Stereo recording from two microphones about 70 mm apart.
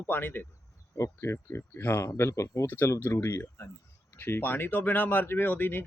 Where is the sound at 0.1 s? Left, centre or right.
Left.